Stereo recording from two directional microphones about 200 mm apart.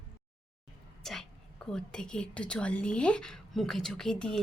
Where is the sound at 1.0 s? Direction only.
Centre (ahead or behind).